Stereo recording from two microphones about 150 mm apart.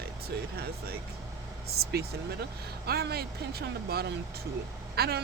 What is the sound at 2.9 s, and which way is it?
Speech, 90° right.